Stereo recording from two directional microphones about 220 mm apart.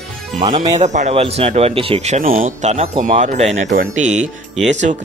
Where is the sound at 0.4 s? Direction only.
25° right (ahead or behind).